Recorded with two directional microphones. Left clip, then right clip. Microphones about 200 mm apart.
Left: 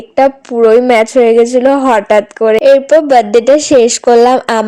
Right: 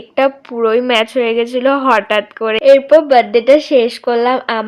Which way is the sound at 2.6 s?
35° left (ahead or behind).